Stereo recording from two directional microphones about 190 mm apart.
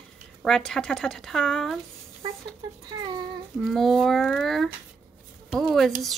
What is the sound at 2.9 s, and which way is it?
Speech, 20° right (ahead or behind).